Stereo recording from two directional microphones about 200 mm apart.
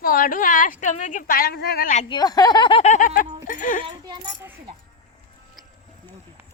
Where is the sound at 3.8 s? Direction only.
25° right (ahead or behind).